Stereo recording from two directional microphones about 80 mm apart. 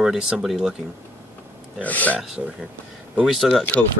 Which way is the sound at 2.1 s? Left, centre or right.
Centre.